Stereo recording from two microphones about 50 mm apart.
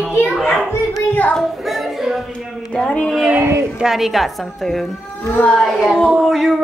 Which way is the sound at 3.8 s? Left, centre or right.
Centre.